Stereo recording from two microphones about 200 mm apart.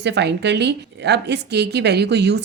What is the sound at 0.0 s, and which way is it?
A woman's voice, 60° right (ahead or behind).